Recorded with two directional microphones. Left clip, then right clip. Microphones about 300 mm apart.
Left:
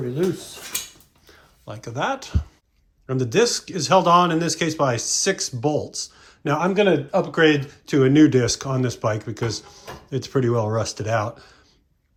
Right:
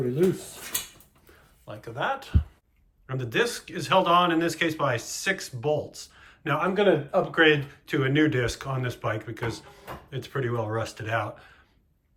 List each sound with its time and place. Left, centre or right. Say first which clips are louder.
1.6 s speech: left 4 dB; left